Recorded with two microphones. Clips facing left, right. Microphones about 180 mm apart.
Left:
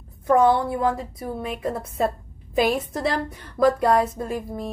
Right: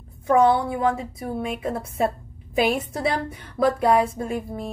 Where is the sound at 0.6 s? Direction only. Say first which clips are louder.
Even; 5° right (ahead or behind).